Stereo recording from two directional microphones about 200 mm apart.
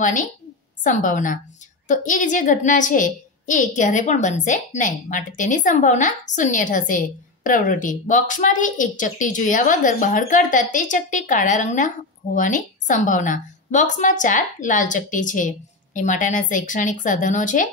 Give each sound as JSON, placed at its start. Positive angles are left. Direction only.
{"t": 0.0, "sound": "a woman's voice", "side_deg": 40}